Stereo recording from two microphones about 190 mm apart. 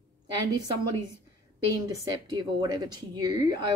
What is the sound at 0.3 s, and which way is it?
Speech, 20° right (ahead or behind).